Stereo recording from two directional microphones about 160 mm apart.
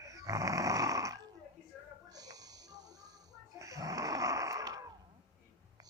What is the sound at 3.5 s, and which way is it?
Snoring, 20° right (ahead or behind).